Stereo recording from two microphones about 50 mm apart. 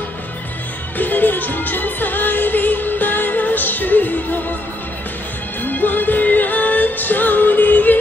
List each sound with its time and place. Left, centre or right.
0.9 s music: left
5.6 s music: left